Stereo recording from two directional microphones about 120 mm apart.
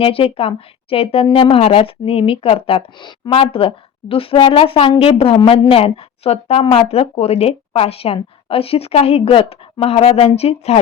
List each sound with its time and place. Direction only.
0.0 s a woman's voice: 50° left (ahead or behind)